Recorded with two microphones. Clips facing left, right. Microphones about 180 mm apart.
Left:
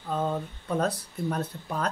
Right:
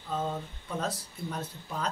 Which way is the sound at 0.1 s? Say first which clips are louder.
Left 4 dB; 60° left (ahead or behind).